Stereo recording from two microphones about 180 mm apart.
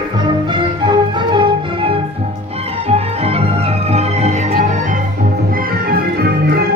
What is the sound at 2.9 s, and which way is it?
Music, 35° right (ahead or behind).